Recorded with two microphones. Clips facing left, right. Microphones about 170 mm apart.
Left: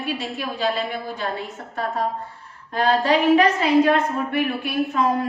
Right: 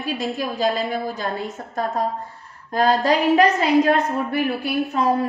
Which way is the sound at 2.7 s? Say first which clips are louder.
Right 1 dB; 40° right (ahead or behind).